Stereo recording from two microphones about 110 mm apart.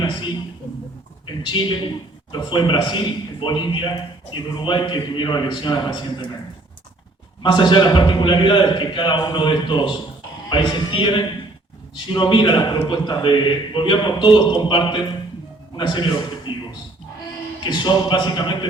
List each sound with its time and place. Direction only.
1.4 s a man's voice: 45° left (ahead or behind)
7.4 s a man's voice: 40° left (ahead or behind)